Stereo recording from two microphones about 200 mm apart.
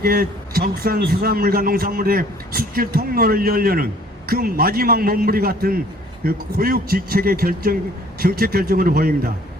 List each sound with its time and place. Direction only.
0.0 s a man's voice: 50° right (ahead or behind)